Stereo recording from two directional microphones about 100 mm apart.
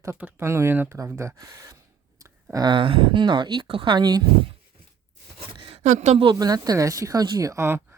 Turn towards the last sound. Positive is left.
turn(degrees=-25)  # may be behind; listen again after turning